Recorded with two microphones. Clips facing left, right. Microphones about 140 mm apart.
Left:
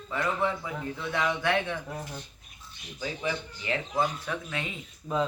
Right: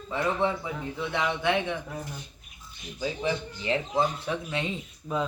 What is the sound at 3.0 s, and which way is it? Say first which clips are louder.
Speech: right 3 dB; 25° right (ahead or behind).